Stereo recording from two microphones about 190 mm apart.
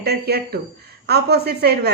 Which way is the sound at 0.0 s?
55° right (ahead or behind).